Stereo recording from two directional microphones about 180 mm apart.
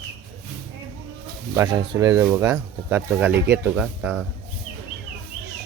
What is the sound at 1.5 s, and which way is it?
Speech, 20° right (ahead or behind).